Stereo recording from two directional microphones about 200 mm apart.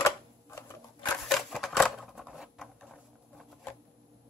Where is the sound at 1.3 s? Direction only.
Centre (ahead or behind).